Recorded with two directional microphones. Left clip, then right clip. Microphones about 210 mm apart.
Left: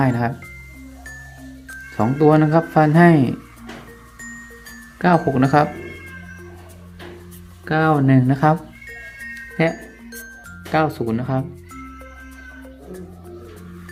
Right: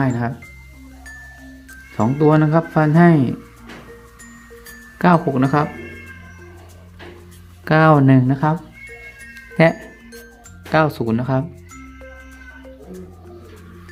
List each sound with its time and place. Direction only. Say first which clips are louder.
0.0 s speech: left 2 dB; centre (ahead or behind)
2.0 s speech: left 1 dB; 5° right (ahead or behind)
4.9 s speech: right 1 dB; 15° right (ahead or behind)
5.3 s speech: left 2 dB; centre (ahead or behind)
7.6 s speech: right 4 dB; 25° right (ahead or behind)
8.3 s speech: left 3 dB; centre (ahead or behind)
9.6 s speech: right 6 dB; 20° right (ahead or behind)